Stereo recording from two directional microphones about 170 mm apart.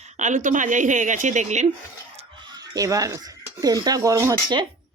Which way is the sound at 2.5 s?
20° right (ahead or behind).